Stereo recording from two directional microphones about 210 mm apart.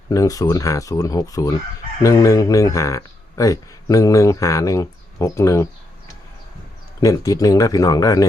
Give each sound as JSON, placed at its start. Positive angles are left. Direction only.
{"t": 0.1, "sound": "speech", "side_deg": 15}
{"t": 7.0, "sound": "speech", "side_deg": 15}